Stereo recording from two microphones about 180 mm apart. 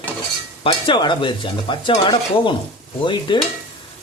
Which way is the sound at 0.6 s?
30° left (ahead or behind).